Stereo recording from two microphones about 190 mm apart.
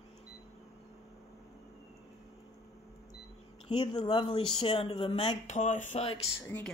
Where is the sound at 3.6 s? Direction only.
30° left (ahead or behind).